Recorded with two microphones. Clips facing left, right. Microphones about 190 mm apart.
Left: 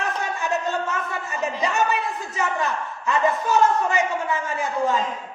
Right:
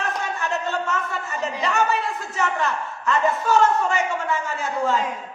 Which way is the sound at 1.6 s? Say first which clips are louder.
Right 1 dB; 15° left (ahead or behind).